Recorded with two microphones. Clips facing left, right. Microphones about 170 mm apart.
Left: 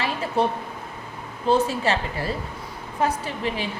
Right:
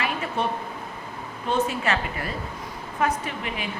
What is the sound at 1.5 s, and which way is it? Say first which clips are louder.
Speech: left 4 dB; 30° left (ahead or behind).